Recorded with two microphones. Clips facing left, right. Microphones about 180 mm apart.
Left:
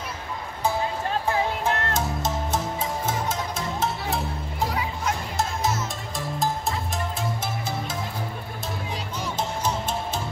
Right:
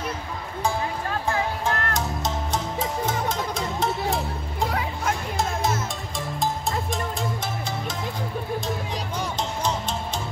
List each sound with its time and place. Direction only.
1.3 s music: 20° left (ahead or behind)
3.5 s music: 5° left (ahead or behind)